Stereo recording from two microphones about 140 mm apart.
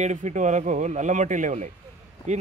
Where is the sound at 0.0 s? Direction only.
60° right (ahead or behind).